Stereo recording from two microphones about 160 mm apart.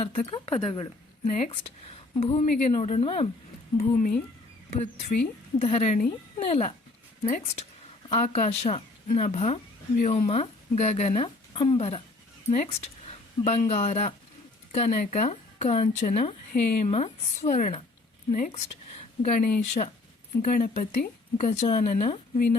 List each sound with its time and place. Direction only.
0.0 s a woman's voice: 35° left (ahead or behind)
1.2 s speech: 50° left (ahead or behind)
1.5 s speech: 40° left (ahead or behind)
3.8 s speech: 55° left (ahead or behind)
4.7 s speech: 40° left (ahead or behind)
11.5 s a woman's voice: 35° left (ahead or behind)